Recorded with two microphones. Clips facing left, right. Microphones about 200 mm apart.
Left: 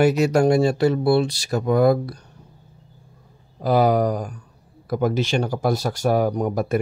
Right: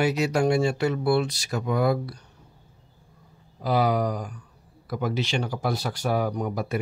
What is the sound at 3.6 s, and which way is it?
Speech, 45° left (ahead or behind).